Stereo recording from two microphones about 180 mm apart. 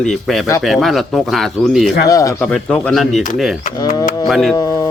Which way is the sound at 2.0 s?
20° left (ahead or behind).